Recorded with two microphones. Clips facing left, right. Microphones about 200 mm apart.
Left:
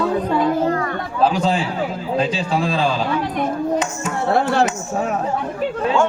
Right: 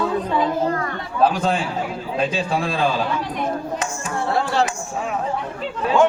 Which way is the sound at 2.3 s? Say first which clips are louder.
Left 2 dB; 55° right (ahead or behind).